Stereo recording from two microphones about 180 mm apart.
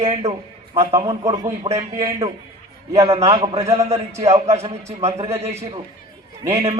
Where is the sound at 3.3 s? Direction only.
30° right (ahead or behind).